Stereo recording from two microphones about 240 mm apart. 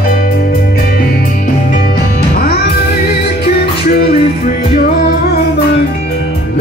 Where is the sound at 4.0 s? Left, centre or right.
Left.